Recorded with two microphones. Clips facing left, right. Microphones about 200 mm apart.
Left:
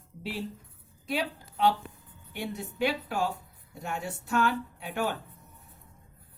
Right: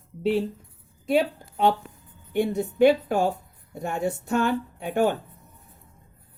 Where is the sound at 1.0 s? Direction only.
50° right (ahead or behind).